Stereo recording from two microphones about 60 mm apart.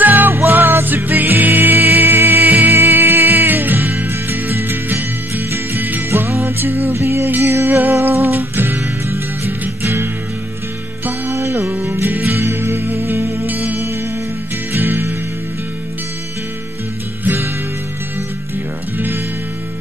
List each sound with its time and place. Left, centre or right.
0.0 s music: right
11.3 s music: right
11.9 s music: right
17.2 s music: right
18.9 s music: right